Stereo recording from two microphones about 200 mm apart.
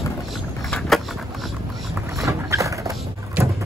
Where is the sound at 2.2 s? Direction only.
15° right (ahead or behind).